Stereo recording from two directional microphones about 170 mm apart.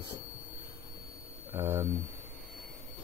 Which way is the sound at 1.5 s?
15° right (ahead or behind).